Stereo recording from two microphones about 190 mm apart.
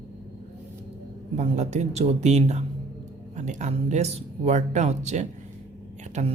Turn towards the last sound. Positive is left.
turn(degrees=-35)  # may be behind; listen again after turning